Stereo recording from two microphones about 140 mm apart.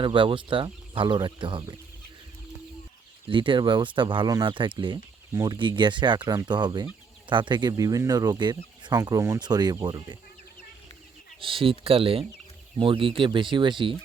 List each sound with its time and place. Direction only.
0.0 s speech: 35° right (ahead or behind)
3.2 s speech: 35° right (ahead or behind)
11.3 s speech: 40° right (ahead or behind)